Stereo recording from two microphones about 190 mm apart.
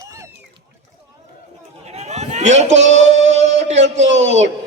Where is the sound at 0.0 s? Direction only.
15° right (ahead or behind).